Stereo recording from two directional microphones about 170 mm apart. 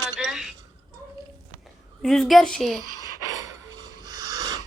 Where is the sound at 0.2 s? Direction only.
Centre (ahead or behind).